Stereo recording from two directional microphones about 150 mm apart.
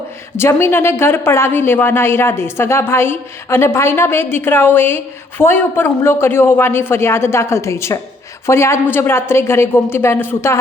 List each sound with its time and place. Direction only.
0.3 s a woman's voice: 15° left (ahead or behind)